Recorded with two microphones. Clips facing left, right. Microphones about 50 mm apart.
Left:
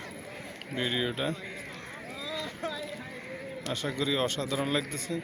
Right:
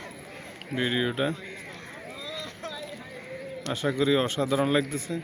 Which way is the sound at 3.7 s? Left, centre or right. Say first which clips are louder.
Right 6 dB; centre.